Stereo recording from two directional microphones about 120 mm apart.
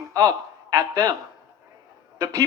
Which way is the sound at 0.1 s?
30° right (ahead or behind).